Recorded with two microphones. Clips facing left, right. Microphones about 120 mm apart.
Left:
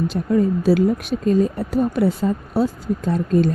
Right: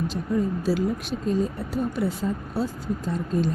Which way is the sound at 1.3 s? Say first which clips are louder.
Left 7 dB; 75° left (ahead or behind).